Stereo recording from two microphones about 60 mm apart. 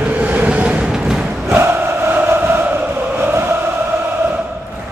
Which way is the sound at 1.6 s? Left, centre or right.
Right.